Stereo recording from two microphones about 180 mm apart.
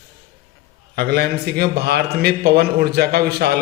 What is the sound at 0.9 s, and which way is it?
A man's voice, 60° right (ahead or behind).